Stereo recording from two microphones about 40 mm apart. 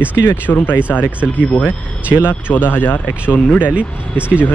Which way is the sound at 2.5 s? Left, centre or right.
Left.